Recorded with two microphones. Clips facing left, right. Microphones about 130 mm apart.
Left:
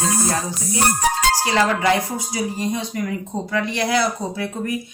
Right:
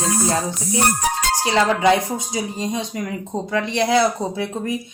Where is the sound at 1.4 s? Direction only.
20° right (ahead or behind).